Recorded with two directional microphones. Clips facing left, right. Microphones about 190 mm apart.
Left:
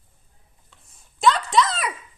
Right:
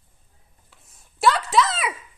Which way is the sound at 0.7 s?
5° right (ahead or behind).